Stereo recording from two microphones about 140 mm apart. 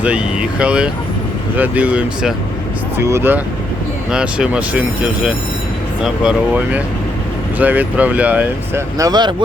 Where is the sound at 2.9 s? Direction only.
15° right (ahead or behind).